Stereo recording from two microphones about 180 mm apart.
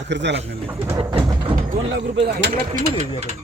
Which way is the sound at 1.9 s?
70° right (ahead or behind).